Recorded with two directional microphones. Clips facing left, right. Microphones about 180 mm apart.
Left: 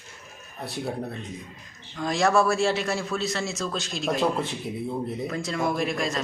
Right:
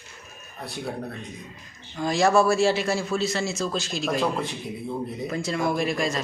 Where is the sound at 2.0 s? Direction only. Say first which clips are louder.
Right 2 dB; centre (ahead or behind).